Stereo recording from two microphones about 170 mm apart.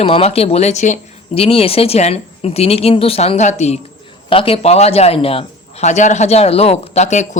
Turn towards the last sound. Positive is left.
turn(degrees=45)  # may be behind; listen again after turning